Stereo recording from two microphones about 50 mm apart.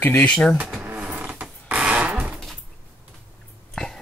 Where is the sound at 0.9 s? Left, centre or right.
Right.